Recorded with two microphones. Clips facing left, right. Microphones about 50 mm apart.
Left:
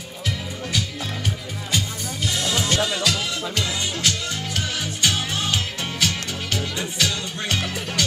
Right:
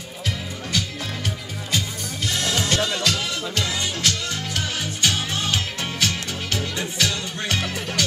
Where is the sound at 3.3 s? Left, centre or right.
Left.